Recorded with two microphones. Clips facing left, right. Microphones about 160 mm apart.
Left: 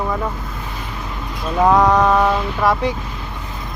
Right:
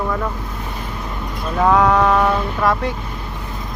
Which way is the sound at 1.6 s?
10° left (ahead or behind).